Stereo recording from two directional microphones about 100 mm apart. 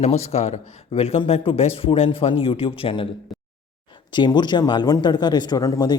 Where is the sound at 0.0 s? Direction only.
90° left; by 3.1 s 65° left (ahead or behind).